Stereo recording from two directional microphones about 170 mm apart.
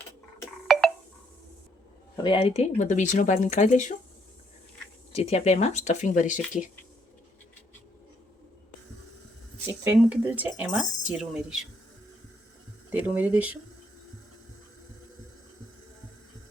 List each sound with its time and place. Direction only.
0.7 s a sound: centre (ahead or behind)
2.2 s speech: 30° left (ahead or behind)
5.1 s speech: 40° left (ahead or behind)
9.6 s speech: 15° right (ahead or behind)
12.9 s speech: 10° right (ahead or behind)